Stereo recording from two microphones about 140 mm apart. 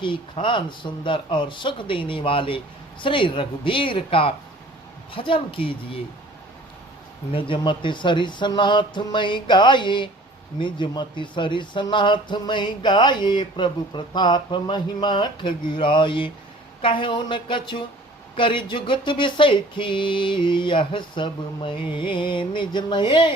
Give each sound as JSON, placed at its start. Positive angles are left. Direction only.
{"t": 0.0, "sound": "speech", "side_deg": 35}
{"t": 7.3, "sound": "speech", "side_deg": 40}